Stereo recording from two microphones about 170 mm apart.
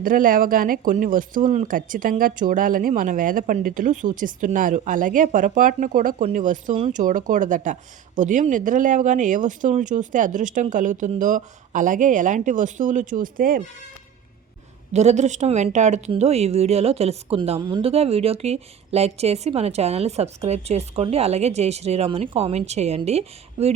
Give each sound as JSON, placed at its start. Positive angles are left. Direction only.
{"t": 0.0, "sound": "speech", "side_deg": -55}
{"t": 14.9, "sound": "a woman's voice", "side_deg": -40}